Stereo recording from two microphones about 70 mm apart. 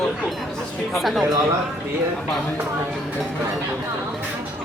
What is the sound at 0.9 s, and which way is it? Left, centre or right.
Speech, centre.